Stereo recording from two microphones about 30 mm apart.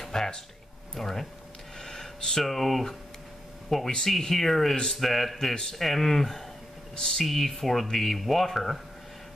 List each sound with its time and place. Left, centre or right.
0.1 s speech: centre
1.8 s a sound: centre
2.1 s speech: centre
2.4 s speech: centre